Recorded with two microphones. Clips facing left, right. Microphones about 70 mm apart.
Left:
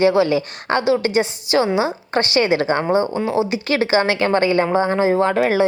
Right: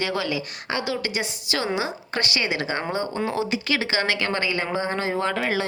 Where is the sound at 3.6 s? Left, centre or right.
Left.